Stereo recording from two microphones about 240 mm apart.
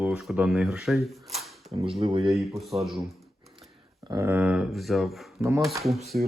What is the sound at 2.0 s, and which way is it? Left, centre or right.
Speech, right.